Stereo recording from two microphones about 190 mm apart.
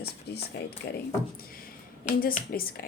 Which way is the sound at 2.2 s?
50° left (ahead or behind).